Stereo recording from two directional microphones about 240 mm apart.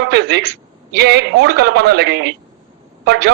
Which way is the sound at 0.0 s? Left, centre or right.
Right.